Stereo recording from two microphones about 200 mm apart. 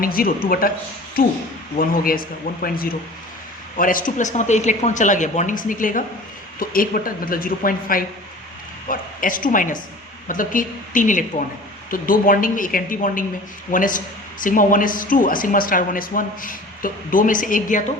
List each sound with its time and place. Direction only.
0.0 s speech: 45° left (ahead or behind)
1.8 s speech: 45° left (ahead or behind)